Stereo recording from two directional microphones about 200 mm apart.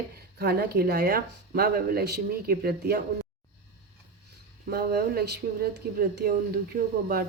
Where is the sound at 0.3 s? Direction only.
55° right (ahead or behind).